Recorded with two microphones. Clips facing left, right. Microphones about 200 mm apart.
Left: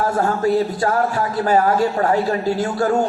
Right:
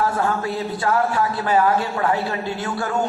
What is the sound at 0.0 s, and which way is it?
A man's voice, 40° left (ahead or behind).